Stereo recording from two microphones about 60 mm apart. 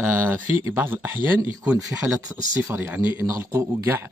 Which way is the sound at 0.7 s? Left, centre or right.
Right.